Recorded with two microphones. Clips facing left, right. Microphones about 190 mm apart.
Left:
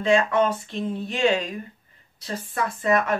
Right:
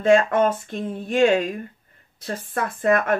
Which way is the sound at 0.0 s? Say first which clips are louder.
Right 3 dB; 50° right (ahead or behind).